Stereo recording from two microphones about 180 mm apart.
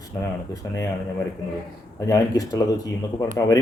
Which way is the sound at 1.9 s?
15° left (ahead or behind).